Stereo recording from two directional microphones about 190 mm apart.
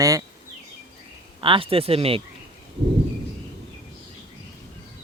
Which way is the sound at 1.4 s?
30° right (ahead or behind).